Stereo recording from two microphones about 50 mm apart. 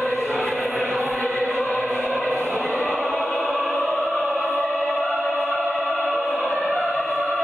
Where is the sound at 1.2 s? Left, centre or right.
Left.